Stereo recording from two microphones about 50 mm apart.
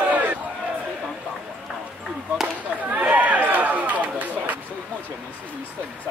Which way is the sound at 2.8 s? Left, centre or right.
Right.